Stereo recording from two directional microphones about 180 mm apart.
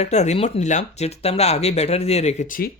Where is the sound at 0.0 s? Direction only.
40° left (ahead or behind).